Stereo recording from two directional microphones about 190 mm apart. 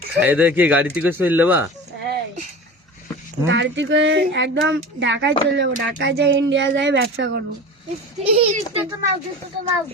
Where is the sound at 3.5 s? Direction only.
75° right (ahead or behind).